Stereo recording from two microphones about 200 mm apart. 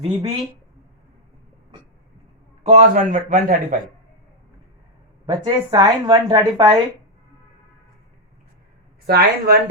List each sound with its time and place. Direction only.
0.0 s speech: 30° right (ahead or behind)
2.6 s a man's voice: 35° right (ahead or behind)
5.2 s a woman's voice: 25° right (ahead or behind)
9.0 s a man's voice: 50° right (ahead or behind)